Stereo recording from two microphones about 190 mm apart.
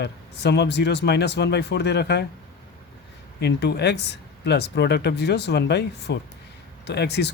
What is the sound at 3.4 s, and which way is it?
Speech, 60° left (ahead or behind).